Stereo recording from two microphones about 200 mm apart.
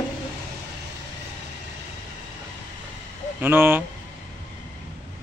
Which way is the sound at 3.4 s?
10° right (ahead or behind).